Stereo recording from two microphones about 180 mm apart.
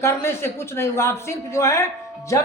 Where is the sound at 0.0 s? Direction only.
15° left (ahead or behind).